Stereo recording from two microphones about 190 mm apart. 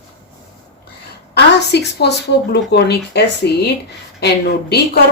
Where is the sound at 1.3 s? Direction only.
60° left (ahead or behind).